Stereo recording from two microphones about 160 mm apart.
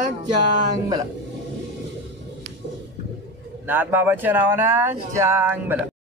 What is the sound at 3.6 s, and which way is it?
Speech, 10° right (ahead or behind).